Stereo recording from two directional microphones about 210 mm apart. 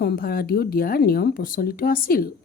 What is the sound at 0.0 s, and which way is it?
Speech, 45° left (ahead or behind).